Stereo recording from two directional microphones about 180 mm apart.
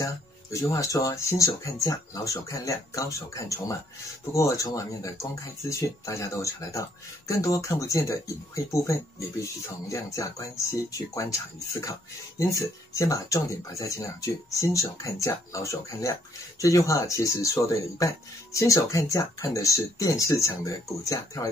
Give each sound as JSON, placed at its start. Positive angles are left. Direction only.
{"t": 0.0, "sound": "speech", "side_deg": 15}